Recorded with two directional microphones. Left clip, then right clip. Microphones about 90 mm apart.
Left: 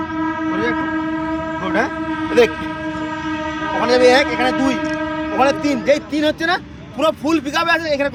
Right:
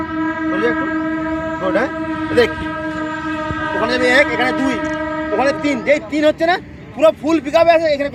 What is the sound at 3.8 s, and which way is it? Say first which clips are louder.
A man's voice: left 1 dB; 40° left (ahead or behind).